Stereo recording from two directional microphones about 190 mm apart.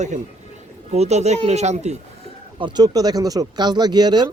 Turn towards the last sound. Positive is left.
turn(degrees=-20)  # may be behind; listen again after turning